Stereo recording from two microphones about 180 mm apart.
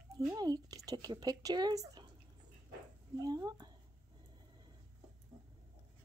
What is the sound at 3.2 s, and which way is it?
Speech, 20° right (ahead or behind).